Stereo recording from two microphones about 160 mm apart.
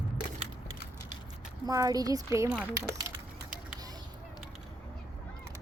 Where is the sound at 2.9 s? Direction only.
15° right (ahead or behind).